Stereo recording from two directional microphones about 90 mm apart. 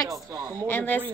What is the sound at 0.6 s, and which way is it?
Speech, 20° left (ahead or behind).